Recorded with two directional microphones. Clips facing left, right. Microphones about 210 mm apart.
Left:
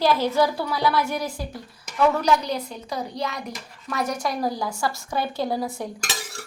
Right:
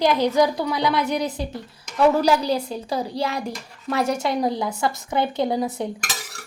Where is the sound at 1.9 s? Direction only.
30° right (ahead or behind).